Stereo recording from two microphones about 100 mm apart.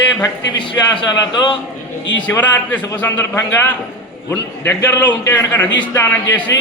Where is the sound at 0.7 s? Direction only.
55° left (ahead or behind).